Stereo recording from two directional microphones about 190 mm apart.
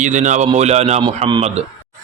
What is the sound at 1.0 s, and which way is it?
Speech, 25° right (ahead or behind).